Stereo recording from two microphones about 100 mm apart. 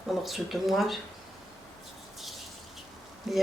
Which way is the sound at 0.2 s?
Centre (ahead or behind).